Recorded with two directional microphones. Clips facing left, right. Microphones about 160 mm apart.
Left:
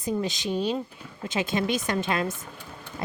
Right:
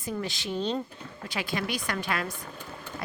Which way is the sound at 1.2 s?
20° left (ahead or behind).